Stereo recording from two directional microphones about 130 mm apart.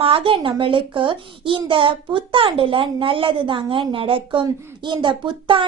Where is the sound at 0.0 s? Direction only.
45° right (ahead or behind).